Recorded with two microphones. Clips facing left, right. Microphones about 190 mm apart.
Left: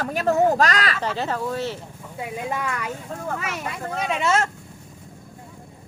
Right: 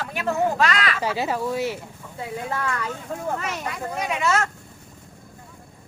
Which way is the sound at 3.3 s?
5° left (ahead or behind).